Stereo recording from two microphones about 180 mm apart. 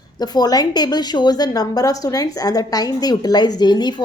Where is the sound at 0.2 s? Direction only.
20° left (ahead or behind).